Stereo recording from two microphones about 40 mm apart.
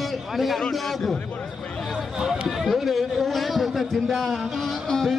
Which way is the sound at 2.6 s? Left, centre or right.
Centre.